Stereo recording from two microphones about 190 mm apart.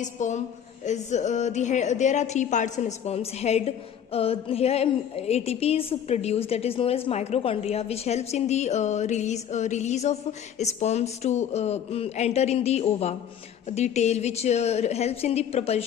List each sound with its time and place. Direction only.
0.0 s a woman's voice: 40° left (ahead or behind)